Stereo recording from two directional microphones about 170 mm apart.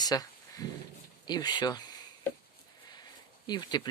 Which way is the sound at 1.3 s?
25° left (ahead or behind).